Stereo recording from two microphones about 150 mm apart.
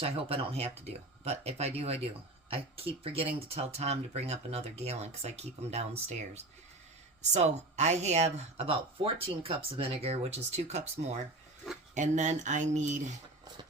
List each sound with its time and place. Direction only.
0.0 s speech: 40° right (ahead or behind)